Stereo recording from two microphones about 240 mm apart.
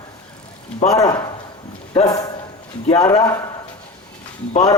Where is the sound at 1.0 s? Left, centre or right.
Left.